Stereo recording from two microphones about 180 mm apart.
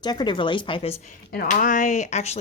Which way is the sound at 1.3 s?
55° left (ahead or behind).